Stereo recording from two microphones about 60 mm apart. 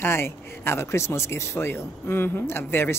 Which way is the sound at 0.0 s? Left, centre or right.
Left.